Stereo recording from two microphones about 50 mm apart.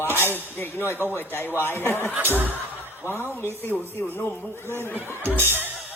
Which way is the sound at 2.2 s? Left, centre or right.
Right.